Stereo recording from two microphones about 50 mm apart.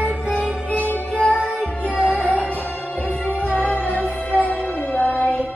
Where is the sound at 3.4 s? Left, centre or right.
Left.